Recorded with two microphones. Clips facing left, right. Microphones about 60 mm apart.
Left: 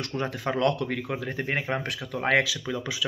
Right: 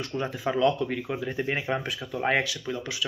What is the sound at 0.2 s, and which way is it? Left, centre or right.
Speech, left.